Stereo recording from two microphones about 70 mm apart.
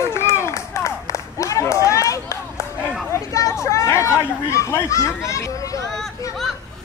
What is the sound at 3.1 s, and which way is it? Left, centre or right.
Speech, left.